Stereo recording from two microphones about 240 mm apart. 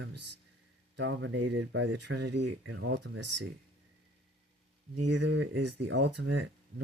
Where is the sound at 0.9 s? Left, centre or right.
Right.